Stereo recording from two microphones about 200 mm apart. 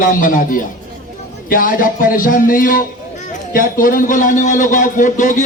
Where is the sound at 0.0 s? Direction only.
45° left (ahead or behind).